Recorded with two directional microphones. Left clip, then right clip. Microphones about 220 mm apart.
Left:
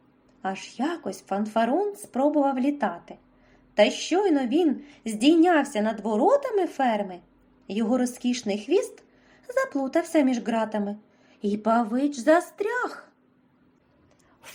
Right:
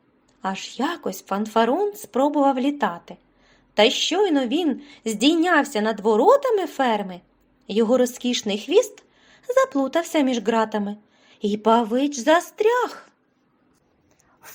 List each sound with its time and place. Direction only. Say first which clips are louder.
0.4 s speech: right 4 dB; 30° right (ahead or behind)
5.8 s speech: right 7 dB; 45° right (ahead or behind)
6.2 s speech: right 2 dB; 30° right (ahead or behind)